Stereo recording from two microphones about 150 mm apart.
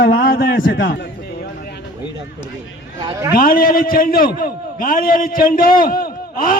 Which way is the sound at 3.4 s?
70° left (ahead or behind).